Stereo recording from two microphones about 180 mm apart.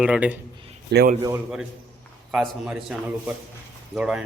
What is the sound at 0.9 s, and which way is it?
Speech, 65° right (ahead or behind).